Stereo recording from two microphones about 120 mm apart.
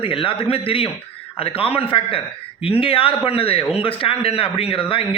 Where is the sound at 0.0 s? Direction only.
45° left (ahead or behind).